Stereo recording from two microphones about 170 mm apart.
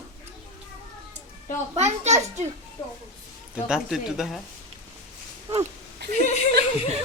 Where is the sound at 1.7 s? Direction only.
40° right (ahead or behind).